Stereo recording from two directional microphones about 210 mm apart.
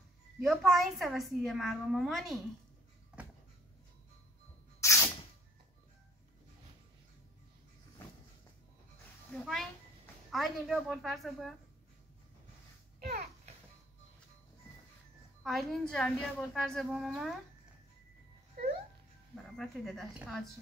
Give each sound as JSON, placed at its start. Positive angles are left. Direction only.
{"t": 0.4, "sound": "a woman's voice", "side_deg": 0}
{"t": 4.8, "sound": "a sound", "side_deg": 15}
{"t": 9.3, "sound": "a sound", "side_deg": 0}
{"t": 10.3, "sound": "a woman's voice", "side_deg": 0}
{"t": 13.0, "sound": "a child's voice", "side_deg": -50}
{"t": 15.4, "sound": "a woman's voice", "side_deg": 0}
{"t": 19.5, "sound": "a woman's voice", "side_deg": 0}